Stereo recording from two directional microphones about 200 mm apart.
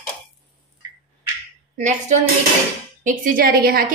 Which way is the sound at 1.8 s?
35° right (ahead or behind).